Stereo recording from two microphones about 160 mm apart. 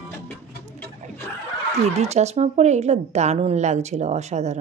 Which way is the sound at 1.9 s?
45° right (ahead or behind).